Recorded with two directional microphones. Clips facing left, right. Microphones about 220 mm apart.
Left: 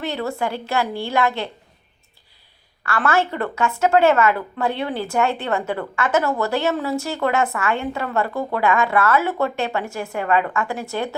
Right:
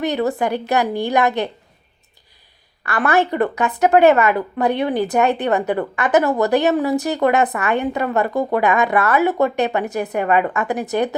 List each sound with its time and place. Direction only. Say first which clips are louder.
0.0 s a woman's voice: right 5 dB; 15° right (ahead or behind)
2.8 s a woman's voice: right 3 dB; 15° right (ahead or behind)